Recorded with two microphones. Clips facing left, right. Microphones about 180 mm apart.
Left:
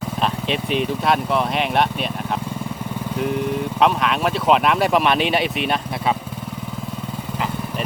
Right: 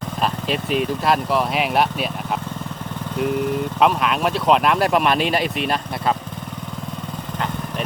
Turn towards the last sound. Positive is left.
turn(degrees=5)  # may be behind; listen again after turning